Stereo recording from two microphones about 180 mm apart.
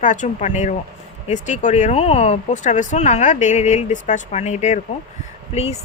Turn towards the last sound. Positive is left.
turn(degrees=35)  # may be behind; listen again after turning